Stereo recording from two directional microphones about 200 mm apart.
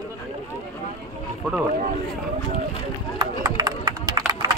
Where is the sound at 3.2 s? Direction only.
20° right (ahead or behind).